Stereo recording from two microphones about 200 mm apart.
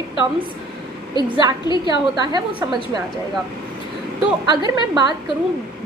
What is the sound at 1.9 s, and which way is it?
A woman's voice, 20° right (ahead or behind).